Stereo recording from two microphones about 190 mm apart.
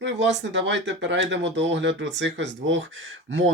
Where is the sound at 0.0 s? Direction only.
70° right (ahead or behind).